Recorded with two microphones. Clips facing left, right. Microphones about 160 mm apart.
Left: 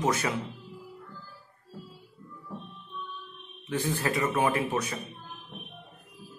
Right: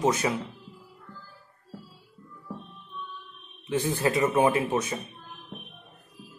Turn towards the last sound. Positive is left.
turn(degrees=-20)  # may be behind; listen again after turning